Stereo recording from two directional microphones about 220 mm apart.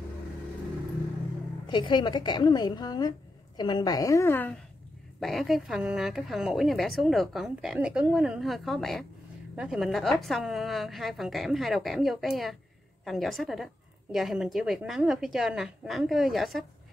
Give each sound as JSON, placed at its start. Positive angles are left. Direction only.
{"t": 1.7, "sound": "a woman's voice", "side_deg": 20}